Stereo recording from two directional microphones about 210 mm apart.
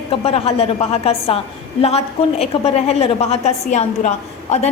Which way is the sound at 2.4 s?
30° left (ahead or behind).